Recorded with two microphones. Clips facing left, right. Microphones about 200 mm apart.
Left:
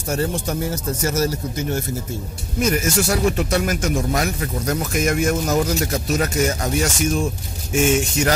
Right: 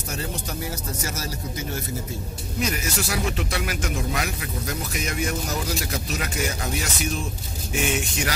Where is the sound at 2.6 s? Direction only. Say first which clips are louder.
Left 8 dB; 45° left (ahead or behind).